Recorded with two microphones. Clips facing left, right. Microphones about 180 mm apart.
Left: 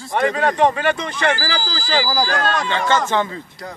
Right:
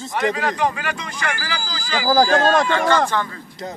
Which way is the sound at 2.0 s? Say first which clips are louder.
Right 5 dB; 50° right (ahead or behind).